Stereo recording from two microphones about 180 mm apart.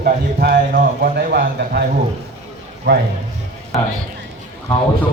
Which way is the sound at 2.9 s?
80° right.